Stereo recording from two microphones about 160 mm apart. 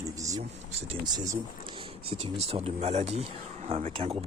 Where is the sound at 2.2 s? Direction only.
40° right (ahead or behind).